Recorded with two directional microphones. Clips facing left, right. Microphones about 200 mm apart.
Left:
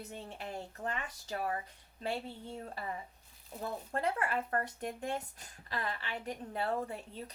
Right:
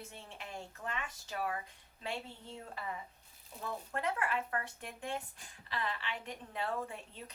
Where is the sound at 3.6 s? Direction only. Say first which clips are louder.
Left 3 dB; 35° left (ahead or behind).